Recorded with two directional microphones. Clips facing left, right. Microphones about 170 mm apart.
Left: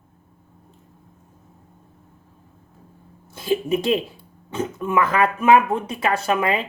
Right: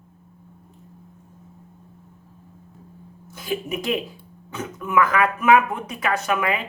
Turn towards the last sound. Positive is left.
turn(degrees=30)  # may be behind; listen again after turning